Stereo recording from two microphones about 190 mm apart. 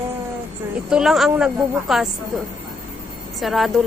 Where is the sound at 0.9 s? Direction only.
Centre (ahead or behind).